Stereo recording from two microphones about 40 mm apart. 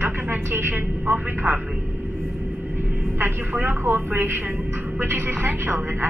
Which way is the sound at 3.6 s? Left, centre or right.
Right.